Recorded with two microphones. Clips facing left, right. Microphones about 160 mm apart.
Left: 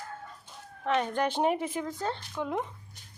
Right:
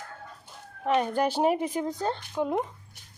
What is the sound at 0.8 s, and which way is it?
A woman's voice, 10° right (ahead or behind).